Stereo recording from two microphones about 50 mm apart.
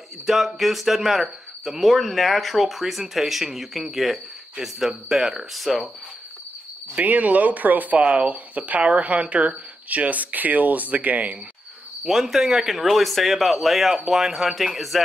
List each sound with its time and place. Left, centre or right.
0.6 s speech: centre
7.0 s speech: right
12.0 s speech: centre